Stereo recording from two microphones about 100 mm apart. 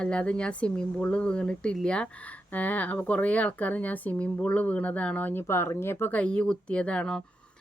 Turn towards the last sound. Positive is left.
turn(degrees=10)  # may be behind; listen again after turning